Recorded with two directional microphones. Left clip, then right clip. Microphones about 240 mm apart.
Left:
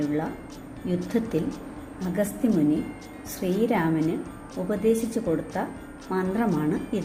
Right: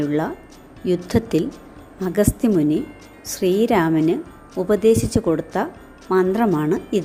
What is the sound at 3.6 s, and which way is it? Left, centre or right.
A woman's voice, right.